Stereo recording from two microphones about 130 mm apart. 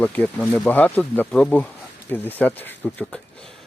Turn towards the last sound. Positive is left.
turn(degrees=10)  # may be behind; listen again after turning